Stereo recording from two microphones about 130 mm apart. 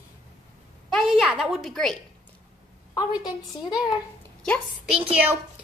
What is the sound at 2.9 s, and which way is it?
A woman's voice, 30° left (ahead or behind).